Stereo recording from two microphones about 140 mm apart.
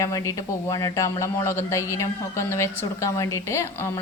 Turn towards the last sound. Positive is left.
turn(degrees=20)  # may be behind; listen again after turning